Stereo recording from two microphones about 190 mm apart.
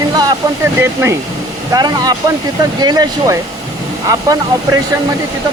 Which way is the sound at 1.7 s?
20° right (ahead or behind).